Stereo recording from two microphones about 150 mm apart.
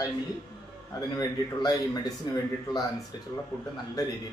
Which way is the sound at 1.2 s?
25° left (ahead or behind).